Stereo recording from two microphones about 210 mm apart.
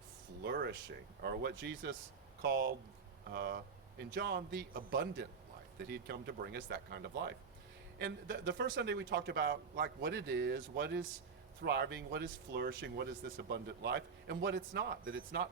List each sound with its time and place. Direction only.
0.4 s speech: 55° right (ahead or behind)